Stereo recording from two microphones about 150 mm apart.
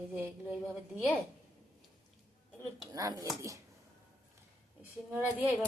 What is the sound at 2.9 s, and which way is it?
Speech, 25° right (ahead or behind).